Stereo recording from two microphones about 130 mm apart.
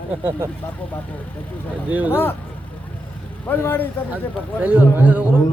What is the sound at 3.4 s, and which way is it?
Speech, 15° left (ahead or behind).